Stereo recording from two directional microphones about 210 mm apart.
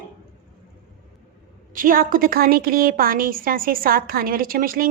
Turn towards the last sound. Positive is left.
turn(degrees=-45)  # may be behind; listen again after turning